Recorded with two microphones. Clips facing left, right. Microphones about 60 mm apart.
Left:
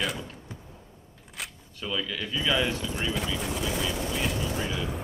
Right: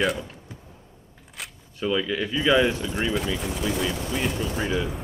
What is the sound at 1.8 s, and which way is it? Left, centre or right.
Speech, right.